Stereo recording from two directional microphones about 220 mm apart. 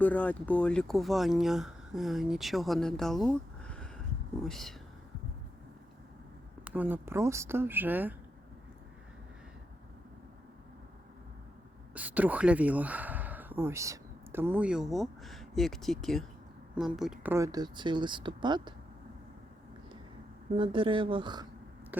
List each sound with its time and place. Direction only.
0.0 s speech: 5° left (ahead or behind)
6.7 s speech: 10° right (ahead or behind)
11.9 s speech: 5° right (ahead or behind)
17.3 s speech: 15° right (ahead or behind)
20.6 s speech: 25° right (ahead or behind)